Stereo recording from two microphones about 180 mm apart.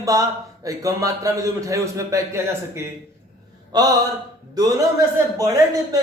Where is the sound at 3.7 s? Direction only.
20° right (ahead or behind).